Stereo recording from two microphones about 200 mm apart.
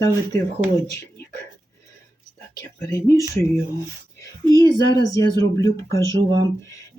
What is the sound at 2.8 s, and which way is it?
Speech, 15° left (ahead or behind).